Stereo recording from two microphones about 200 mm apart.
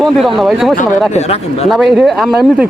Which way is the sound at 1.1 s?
30° left (ahead or behind).